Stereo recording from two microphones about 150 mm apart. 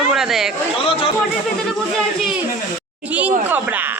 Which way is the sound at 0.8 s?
40° left (ahead or behind).